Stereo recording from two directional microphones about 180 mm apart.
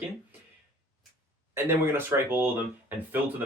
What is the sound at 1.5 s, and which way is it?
Speech, 15° right (ahead or behind).